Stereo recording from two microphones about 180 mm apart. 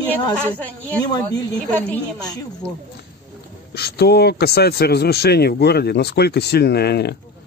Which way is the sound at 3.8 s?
65° left (ahead or behind).